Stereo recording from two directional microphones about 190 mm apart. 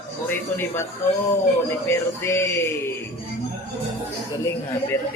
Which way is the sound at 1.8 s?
15° left (ahead or behind).